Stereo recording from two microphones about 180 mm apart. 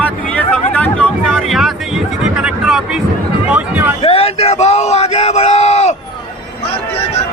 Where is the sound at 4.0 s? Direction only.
30° left (ahead or behind).